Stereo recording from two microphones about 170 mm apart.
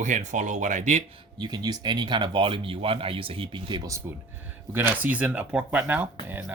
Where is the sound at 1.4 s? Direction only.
25° right (ahead or behind).